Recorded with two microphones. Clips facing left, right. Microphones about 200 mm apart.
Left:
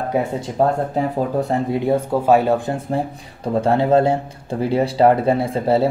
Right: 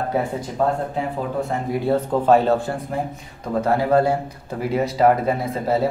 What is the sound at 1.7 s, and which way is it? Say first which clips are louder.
Speech: left 2 dB; 15° left (ahead or behind).